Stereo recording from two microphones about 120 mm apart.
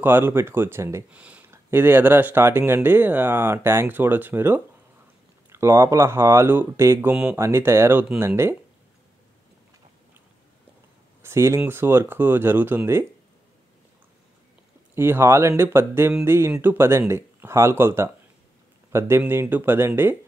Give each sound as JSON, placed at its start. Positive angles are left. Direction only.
{"t": 0.0, "sound": "speech", "side_deg": -20}
{"t": 1.1, "sound": "speech", "side_deg": -10}
{"t": 11.2, "sound": "speech", "side_deg": -25}
{"t": 15.0, "sound": "speech", "side_deg": -20}